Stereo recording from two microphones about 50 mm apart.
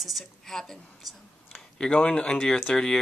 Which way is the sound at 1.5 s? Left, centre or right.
Centre.